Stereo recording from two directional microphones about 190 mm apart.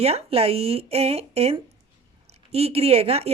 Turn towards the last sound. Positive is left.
turn(degrees=-30)  # may be behind; listen again after turning